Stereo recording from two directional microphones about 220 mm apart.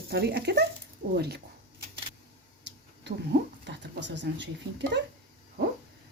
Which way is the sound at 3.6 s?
55° right (ahead or behind).